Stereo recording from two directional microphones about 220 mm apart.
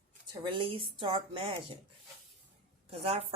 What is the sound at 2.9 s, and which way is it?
Speech, 25° right (ahead or behind).